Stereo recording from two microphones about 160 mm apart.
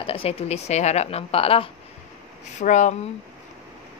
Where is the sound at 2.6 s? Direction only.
50° left (ahead or behind).